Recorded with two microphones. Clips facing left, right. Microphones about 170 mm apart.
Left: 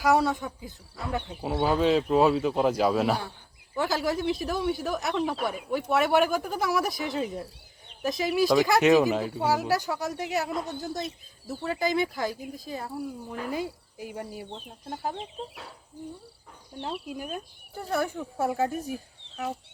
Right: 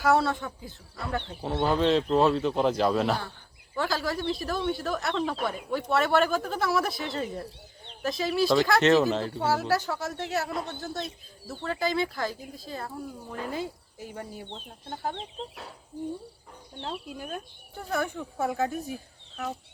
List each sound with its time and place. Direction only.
0.0 s speech: 15° left (ahead or behind)
10.5 s speech: centre (ahead or behind)
10.9 s speech: 15° left (ahead or behind)
16.8 s speech: 10° left (ahead or behind)